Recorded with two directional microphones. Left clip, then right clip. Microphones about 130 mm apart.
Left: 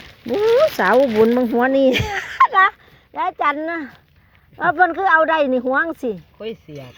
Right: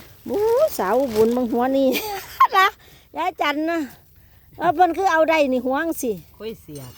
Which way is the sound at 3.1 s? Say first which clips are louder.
Left 3 dB; 20° right (ahead or behind).